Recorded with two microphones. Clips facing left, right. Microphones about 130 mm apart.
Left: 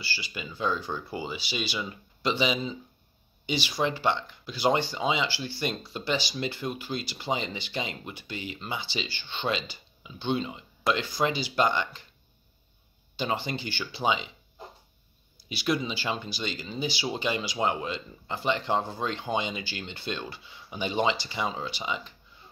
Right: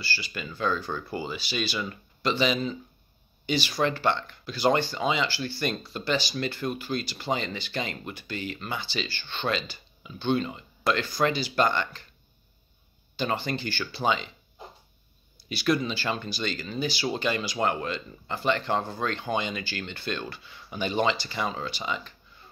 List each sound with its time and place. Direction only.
0.0 s speech: 15° left (ahead or behind)
13.1 s speech: 15° left (ahead or behind)
15.4 s speech: 15° left (ahead or behind)